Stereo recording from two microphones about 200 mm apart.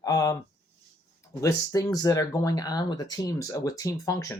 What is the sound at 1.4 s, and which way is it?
Speech, 15° left (ahead or behind).